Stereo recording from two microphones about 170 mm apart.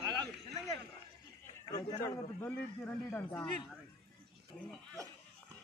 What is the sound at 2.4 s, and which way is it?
A man's voice, 10° left (ahead or behind).